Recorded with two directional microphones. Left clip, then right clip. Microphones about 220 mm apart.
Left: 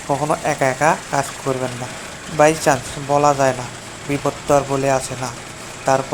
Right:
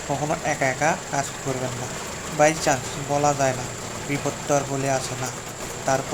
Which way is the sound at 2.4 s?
20° left (ahead or behind).